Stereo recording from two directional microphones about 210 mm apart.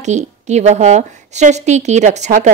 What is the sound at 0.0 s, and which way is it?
A woman's voice, 35° right (ahead or behind).